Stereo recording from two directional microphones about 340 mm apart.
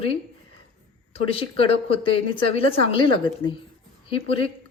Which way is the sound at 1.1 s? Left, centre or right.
Centre.